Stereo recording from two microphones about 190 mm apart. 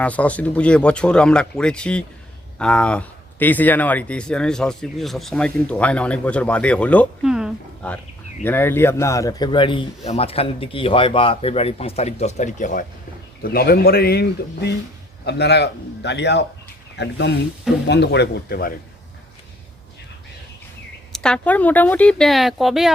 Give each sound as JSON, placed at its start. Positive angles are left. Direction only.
{"t": 0.0, "sound": "speech", "side_deg": 5}
{"t": 8.4, "sound": "speech", "side_deg": 10}
{"t": 13.4, "sound": "a man's voice", "side_deg": 55}
{"t": 21.1, "sound": "speech", "side_deg": 5}